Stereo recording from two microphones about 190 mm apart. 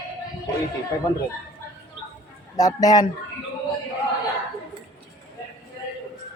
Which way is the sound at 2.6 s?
20° left (ahead or behind).